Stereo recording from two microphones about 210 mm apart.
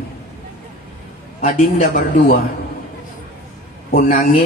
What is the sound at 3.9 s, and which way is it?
Speech, 40° left (ahead or behind).